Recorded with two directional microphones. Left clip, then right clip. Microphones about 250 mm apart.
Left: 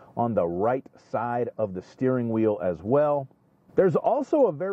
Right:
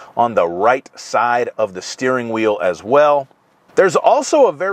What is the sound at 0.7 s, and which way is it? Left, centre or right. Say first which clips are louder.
Speech: right 12 dB; centre.